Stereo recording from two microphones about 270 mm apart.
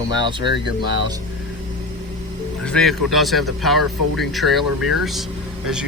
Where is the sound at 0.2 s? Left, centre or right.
Centre.